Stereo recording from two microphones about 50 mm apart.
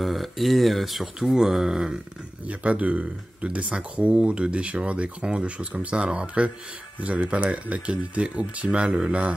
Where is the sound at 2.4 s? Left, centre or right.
Right.